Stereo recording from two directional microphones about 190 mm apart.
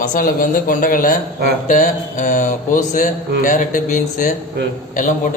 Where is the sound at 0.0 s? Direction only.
45° left (ahead or behind).